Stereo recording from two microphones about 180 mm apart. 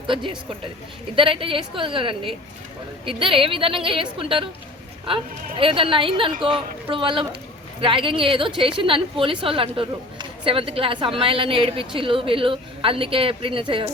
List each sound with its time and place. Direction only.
1.1 s a woman's voice: 30° right (ahead or behind)
5.5 s a woman's voice: 30° right (ahead or behind)